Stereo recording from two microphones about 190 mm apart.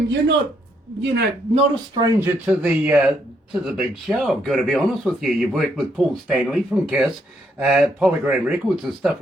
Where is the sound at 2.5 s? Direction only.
5° right (ahead or behind).